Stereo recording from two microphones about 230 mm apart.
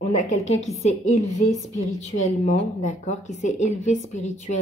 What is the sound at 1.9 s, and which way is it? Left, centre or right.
Speech, left.